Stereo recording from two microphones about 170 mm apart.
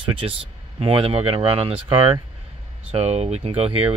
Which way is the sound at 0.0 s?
30° right (ahead or behind).